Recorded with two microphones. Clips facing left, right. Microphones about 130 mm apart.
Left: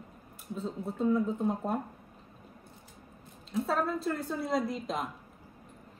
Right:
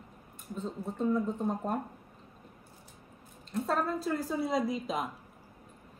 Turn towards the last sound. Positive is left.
turn(degrees=0)  # may be behind; listen again after turning